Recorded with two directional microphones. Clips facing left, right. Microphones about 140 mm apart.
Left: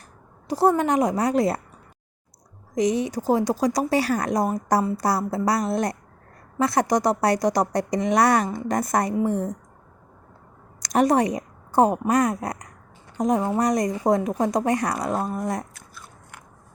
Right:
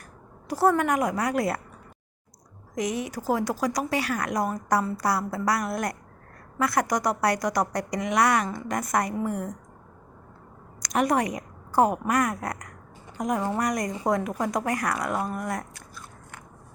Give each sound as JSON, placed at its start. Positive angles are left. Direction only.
{"t": 0.4, "sound": "a woman's voice", "side_deg": 20}
{"t": 2.7, "sound": "a woman's voice", "side_deg": 25}
{"t": 10.8, "sound": "a woman's voice", "side_deg": 30}